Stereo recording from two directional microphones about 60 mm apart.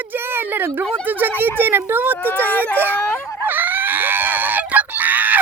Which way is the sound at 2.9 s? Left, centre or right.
Left.